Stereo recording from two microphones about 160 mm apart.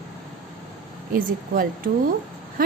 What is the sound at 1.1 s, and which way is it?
A woman's voice, 60° right (ahead or behind).